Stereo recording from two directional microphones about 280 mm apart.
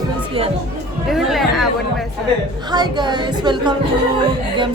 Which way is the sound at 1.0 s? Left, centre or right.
Centre.